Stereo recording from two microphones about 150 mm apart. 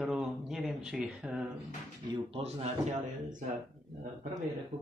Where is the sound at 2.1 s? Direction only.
40° right (ahead or behind).